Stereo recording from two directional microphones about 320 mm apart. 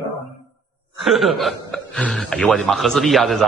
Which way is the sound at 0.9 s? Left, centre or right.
Centre.